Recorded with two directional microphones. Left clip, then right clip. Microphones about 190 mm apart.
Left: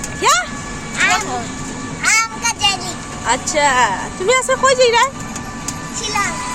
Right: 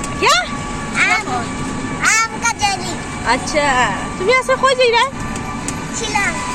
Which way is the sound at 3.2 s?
15° left (ahead or behind).